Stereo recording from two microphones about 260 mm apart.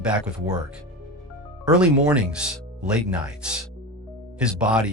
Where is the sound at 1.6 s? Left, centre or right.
Centre.